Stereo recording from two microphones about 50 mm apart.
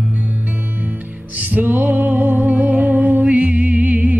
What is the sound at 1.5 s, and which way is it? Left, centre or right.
Music, right.